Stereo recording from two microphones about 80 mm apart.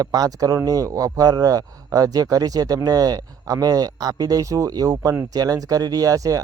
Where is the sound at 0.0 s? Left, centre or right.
Right.